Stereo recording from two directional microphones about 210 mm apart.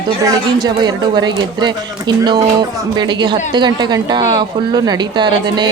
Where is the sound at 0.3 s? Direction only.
20° right (ahead or behind).